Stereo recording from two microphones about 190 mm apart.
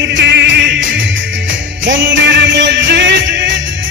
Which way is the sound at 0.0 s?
65° right (ahead or behind).